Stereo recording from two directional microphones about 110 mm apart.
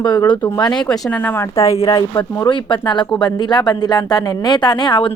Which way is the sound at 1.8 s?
40° left (ahead or behind).